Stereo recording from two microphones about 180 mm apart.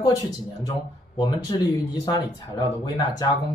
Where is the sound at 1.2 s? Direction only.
20° left (ahead or behind).